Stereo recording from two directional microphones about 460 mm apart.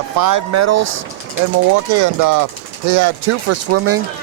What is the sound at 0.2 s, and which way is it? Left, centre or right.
Speech, right.